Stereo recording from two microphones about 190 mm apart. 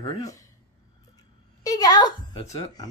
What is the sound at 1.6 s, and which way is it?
A child's voice, 20° left (ahead or behind).